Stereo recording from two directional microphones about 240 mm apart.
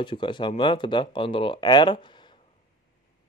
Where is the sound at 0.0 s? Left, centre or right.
Centre.